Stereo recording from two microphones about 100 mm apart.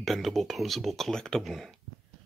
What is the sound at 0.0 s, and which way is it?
Speech, centre (ahead or behind).